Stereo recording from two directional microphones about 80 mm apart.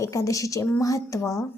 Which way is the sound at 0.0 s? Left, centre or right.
Left.